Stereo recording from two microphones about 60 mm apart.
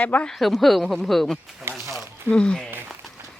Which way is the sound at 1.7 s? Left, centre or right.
Right.